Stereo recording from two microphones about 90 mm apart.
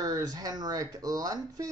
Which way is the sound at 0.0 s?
45° right (ahead or behind).